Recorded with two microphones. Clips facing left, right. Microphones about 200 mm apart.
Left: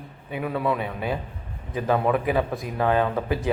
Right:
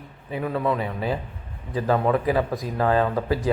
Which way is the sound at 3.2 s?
20° left (ahead or behind).